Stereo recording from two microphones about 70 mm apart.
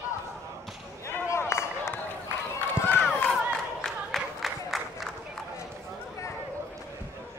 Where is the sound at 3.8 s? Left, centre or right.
Centre.